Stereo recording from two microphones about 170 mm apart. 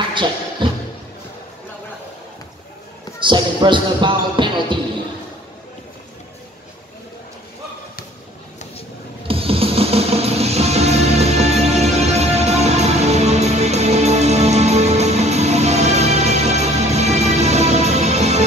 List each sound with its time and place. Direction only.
0.1 s music: 30° right (ahead or behind)
3.2 s speech: 30° right (ahead or behind)
9.3 s music: 35° right (ahead or behind)